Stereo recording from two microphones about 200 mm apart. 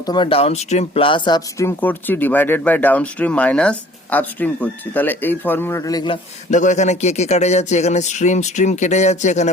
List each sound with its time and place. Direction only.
0.0 s speech: 20° left (ahead or behind)
6.5 s speech: 40° left (ahead or behind)